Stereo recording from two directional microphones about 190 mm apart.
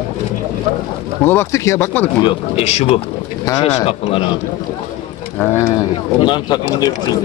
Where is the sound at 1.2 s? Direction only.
10° left (ahead or behind).